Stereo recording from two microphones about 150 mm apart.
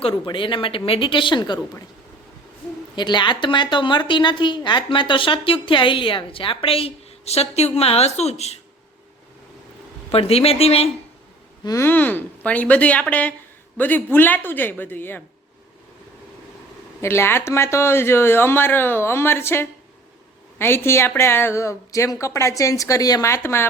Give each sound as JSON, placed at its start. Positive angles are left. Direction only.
{"t": 0.1, "sound": "a woman's voice", "side_deg": 30}
{"t": 2.9, "sound": "a woman's voice", "side_deg": 30}
{"t": 10.1, "sound": "a woman's voice", "side_deg": 40}
{"t": 11.6, "sound": "speech", "side_deg": 20}
{"t": 17.0, "sound": "a woman's voice", "side_deg": 15}